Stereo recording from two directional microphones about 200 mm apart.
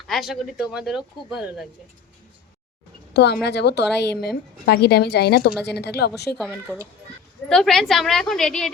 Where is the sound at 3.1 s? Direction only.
55° left (ahead or behind).